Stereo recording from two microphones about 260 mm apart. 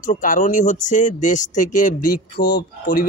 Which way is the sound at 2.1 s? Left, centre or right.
Centre.